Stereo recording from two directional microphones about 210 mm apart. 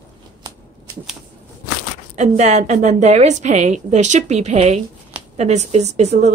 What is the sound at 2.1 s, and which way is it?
Speech, 30° right (ahead or behind).